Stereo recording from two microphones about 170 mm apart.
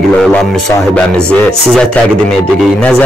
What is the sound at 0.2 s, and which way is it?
A man's voice, centre (ahead or behind).